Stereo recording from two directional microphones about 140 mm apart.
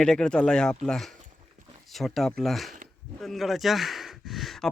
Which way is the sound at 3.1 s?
Centre (ahead or behind).